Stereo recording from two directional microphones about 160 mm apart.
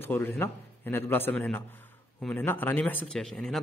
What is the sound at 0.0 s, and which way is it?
A man's voice, 15° left (ahead or behind).